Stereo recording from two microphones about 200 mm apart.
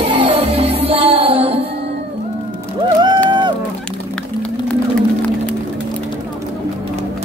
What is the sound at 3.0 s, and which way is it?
Music, 25° right (ahead or behind).